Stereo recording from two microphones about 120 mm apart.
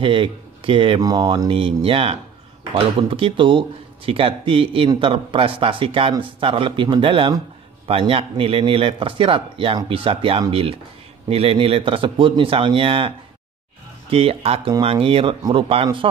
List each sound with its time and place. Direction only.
0.0 s speech: 45° right (ahead or behind)
14.1 s speech: 55° right (ahead or behind)